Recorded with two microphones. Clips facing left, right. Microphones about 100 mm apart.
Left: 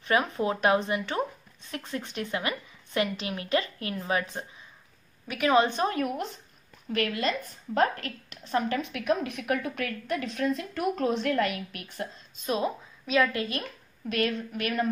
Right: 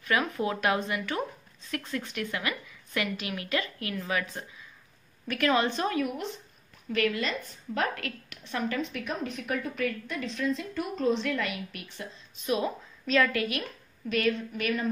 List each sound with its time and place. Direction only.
0.0 s a woman's voice: 30° left (ahead or behind)
5.9 s a woman's voice: 45° left (ahead or behind)
12.4 s a woman's voice: 30° left (ahead or behind)
13.0 s a woman's voice: 15° left (ahead or behind)
13.3 s a woman's voice: 25° left (ahead or behind)
13.6 s a woman's voice: 45° left (ahead or behind)